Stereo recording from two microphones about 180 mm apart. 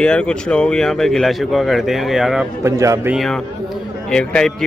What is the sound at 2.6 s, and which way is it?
Speech, 15° right (ahead or behind).